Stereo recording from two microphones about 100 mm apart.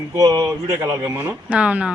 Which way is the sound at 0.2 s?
35° right (ahead or behind).